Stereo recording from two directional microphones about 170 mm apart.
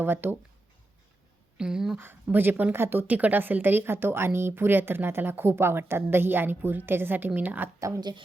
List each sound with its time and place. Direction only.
0.0 s speech: 10° right (ahead or behind)
1.5 s speech: 5° right (ahead or behind); by 8.2 s 20° right (ahead or behind)